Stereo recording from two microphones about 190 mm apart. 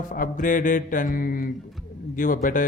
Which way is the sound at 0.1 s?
45° left (ahead or behind).